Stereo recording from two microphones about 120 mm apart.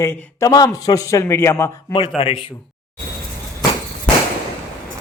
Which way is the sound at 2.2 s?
55° left (ahead or behind).